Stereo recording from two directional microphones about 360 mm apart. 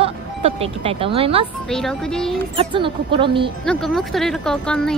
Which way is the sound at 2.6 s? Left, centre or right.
Centre.